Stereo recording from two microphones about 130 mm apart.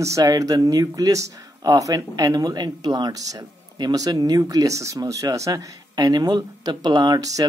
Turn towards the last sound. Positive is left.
turn(degrees=-25)  # may be behind; listen again after turning